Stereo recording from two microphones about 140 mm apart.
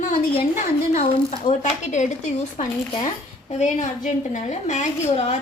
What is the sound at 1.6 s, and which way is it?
A woman's voice, 55° left (ahead or behind).